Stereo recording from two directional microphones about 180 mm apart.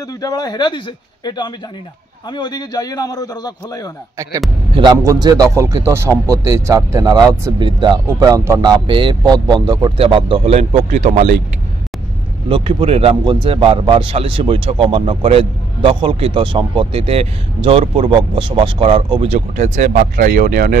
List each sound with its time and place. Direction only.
0.2 s a man's voice: 20° left (ahead or behind)
4.2 s speech: 15° right (ahead or behind); by 11.2 s 40° right (ahead or behind)
12.4 s speech: 30° right (ahead or behind); by 20.7 s 50° right (ahead or behind)